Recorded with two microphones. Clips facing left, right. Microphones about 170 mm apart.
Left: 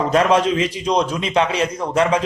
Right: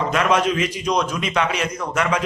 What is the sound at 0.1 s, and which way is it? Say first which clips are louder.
A man's voice: left 4 dB; 30° left (ahead or behind).